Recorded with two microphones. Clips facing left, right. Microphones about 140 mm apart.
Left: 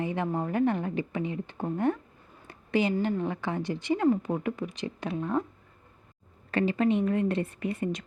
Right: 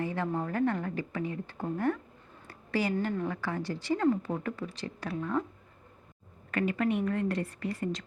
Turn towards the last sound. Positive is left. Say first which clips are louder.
# left 3 dB
turn(degrees=20)  # may be behind; listen again after turning